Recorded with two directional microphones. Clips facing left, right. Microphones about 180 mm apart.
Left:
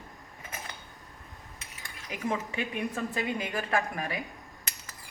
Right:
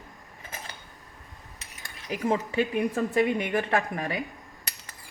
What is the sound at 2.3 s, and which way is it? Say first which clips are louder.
Speech: right 9 dB; 30° right (ahead or behind).